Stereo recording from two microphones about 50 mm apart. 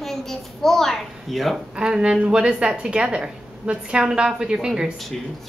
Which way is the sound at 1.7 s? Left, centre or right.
Centre.